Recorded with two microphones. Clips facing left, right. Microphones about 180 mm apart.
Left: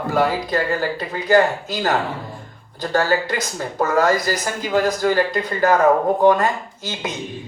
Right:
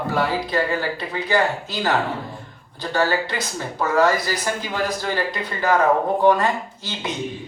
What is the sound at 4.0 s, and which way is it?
Speech, 45° left (ahead or behind).